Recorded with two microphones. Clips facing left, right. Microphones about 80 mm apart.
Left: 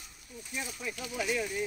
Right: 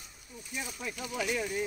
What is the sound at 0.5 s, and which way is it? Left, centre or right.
Speech, centre.